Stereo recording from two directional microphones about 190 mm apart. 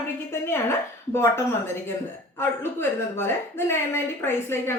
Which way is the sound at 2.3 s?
10° left (ahead or behind).